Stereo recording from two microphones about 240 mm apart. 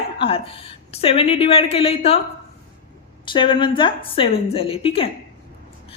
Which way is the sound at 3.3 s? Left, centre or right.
Left.